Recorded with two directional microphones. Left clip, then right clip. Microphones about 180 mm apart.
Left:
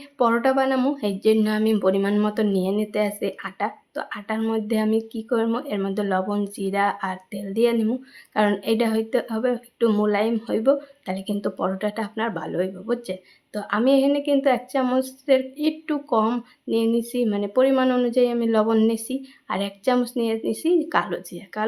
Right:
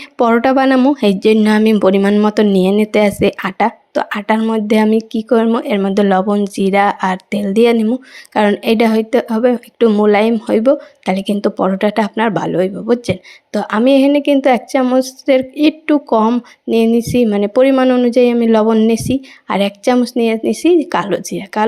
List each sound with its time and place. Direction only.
0.2 s speech: 45° right (ahead or behind)
10.1 s speech: 40° right (ahead or behind)